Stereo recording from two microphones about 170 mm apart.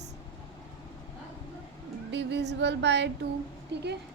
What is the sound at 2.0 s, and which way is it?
Female singing, 90° right.